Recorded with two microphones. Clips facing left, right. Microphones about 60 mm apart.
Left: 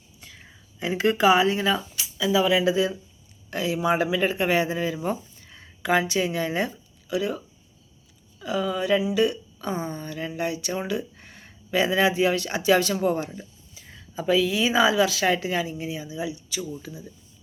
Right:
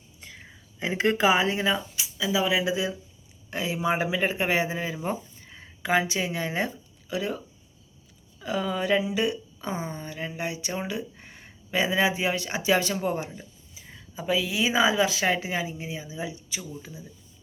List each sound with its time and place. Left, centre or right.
0.8 s speech: right; by 2.9 s centre
3.5 s speech: right
7.1 s speech: right
8.4 s speech: right
13.2 s speech: centre; by 16.6 s right